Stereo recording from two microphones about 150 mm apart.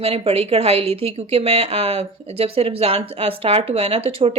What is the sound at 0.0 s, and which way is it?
Speech, 40° right (ahead or behind).